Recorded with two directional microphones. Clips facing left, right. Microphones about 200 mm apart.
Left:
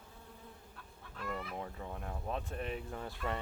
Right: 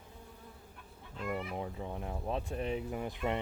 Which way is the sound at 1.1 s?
20° right (ahead or behind).